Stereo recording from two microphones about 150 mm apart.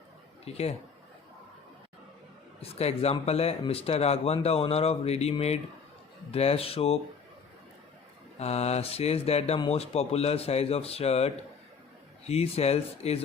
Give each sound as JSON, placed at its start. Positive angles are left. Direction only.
{"t": 0.4, "sound": "speech", "side_deg": 45}
{"t": 2.6, "sound": "speech", "side_deg": 40}
{"t": 8.4, "sound": "speech", "side_deg": 45}